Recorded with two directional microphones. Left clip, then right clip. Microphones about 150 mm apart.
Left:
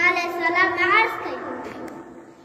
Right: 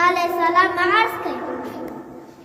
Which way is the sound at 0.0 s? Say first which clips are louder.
Right 3 dB; 25° right (ahead or behind).